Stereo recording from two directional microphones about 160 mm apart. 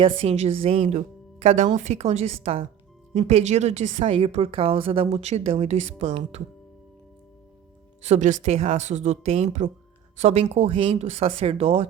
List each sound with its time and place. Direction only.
0.2 s a woman's voice: 40° right (ahead or behind)
8.0 s a woman's voice: 50° right (ahead or behind)